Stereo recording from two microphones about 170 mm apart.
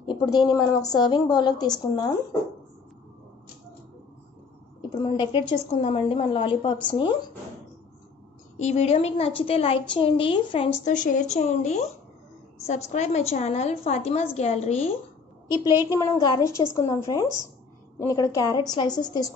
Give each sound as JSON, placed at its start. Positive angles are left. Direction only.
{"t": 0.1, "sound": "a woman's voice", "side_deg": 25}
{"t": 4.8, "sound": "a woman's voice", "side_deg": 30}
{"t": 8.5, "sound": "a woman's voice", "side_deg": 40}
{"t": 10.9, "sound": "a woman's voice", "side_deg": 45}
{"t": 15.8, "sound": "a woman's voice", "side_deg": 20}